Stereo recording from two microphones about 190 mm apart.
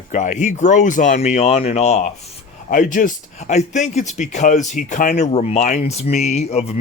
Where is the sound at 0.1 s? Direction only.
40° left (ahead or behind).